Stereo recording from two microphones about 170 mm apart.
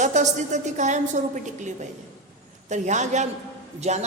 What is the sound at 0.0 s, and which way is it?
A woman's voice, 45° right (ahead or behind).